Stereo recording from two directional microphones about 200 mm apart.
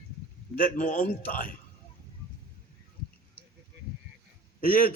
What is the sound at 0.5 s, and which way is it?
A man's voice, 45° left (ahead or behind).